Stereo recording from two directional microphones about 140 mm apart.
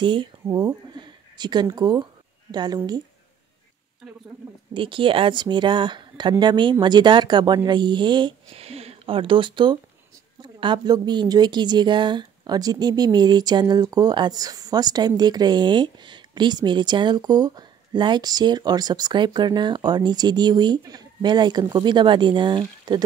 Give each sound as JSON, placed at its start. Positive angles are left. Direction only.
{"t": 0.0, "sound": "a woman's voice", "side_deg": -35}
{"t": 4.7, "sound": "a woman's voice", "side_deg": -35}